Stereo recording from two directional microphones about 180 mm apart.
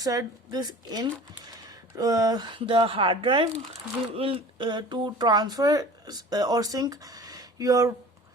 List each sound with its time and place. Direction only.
0.0 s speech: 20° right (ahead or behind)